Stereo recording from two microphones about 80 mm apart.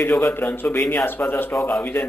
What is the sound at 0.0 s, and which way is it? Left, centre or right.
Speech, left.